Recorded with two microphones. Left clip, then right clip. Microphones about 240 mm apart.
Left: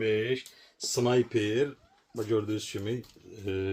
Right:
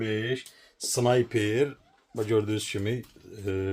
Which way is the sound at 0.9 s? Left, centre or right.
Right.